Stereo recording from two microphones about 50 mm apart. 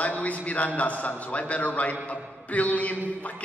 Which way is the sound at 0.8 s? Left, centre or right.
Left.